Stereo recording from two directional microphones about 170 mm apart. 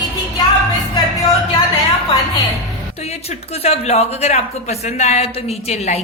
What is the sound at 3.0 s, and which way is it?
Speech, 35° left (ahead or behind).